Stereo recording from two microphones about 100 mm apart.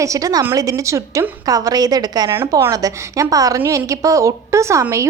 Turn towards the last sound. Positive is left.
turn(degrees=-30)  # may be behind; listen again after turning